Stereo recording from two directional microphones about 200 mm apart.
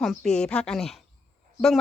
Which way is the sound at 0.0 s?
5° left (ahead or behind).